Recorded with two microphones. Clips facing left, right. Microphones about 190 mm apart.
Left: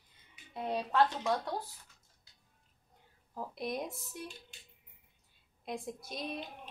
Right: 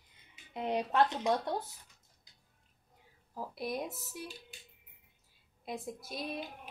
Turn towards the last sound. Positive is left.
turn(degrees=-5)  # may be behind; listen again after turning